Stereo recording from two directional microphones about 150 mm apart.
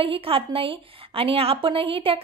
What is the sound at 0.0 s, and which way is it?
A woman's voice, 40° right (ahead or behind).